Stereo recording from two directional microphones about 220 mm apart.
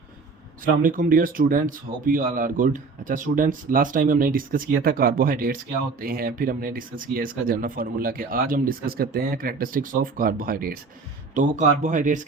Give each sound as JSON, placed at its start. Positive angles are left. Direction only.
{"t": 0.8, "sound": "speech", "side_deg": -40}